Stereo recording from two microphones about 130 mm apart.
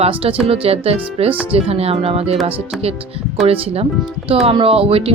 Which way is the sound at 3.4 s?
50° right (ahead or behind).